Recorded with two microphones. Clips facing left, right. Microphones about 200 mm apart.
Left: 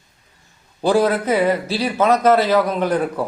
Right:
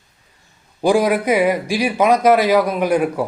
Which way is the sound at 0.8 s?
10° right (ahead or behind).